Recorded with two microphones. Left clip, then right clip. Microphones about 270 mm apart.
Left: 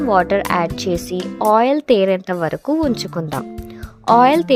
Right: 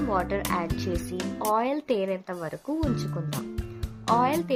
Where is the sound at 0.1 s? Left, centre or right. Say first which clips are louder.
Left 14 dB; left.